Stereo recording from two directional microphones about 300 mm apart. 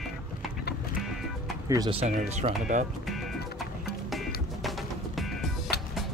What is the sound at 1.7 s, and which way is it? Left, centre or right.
Speech, centre.